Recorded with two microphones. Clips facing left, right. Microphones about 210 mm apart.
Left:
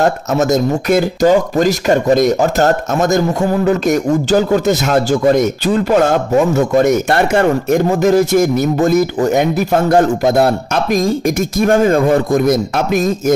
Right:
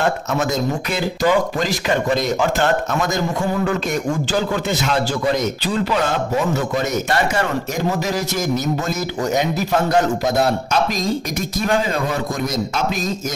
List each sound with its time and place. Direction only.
0.0 s a man's voice: 40° left (ahead or behind)